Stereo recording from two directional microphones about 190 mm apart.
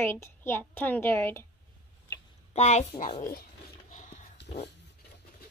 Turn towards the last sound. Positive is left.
turn(degrees=35)  # may be behind; listen again after turning